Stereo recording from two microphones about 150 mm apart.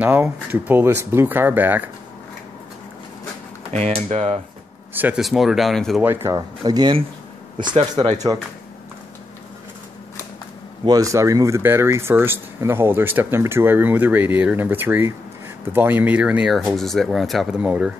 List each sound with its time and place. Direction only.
0.0 s speech: 10° right (ahead or behind)
3.7 s speech: 45° right (ahead or behind)
4.9 s speech: 10° right (ahead or behind)
6.0 s speech: 15° right (ahead or behind)
6.6 s speech: 30° right (ahead or behind)
10.9 s speech: 20° right (ahead or behind)